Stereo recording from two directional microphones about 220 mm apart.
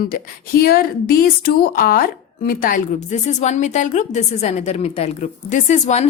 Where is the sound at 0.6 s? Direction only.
45° left (ahead or behind).